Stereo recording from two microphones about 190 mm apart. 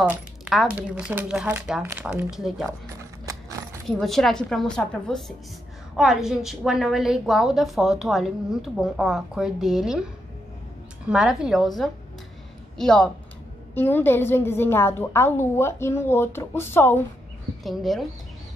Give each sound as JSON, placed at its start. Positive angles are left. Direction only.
{"t": 0.0, "sound": "a woman's voice", "side_deg": -5}
{"t": 3.0, "sound": "horse", "side_deg": -15}
{"t": 3.8, "sound": "a woman's voice", "side_deg": 0}
{"t": 11.1, "sound": "a woman's voice", "side_deg": -5}
{"t": 17.6, "sound": "a woman's voice", "side_deg": 0}